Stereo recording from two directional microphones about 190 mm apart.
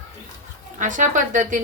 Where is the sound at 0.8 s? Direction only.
40° right (ahead or behind).